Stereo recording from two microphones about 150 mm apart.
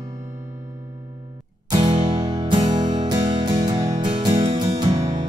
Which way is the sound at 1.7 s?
30° right (ahead or behind).